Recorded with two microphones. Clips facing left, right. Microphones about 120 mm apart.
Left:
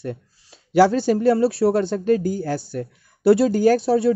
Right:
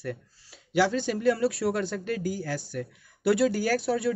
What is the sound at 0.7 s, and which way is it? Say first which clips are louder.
Speech: left 9 dB; 40° left (ahead or behind).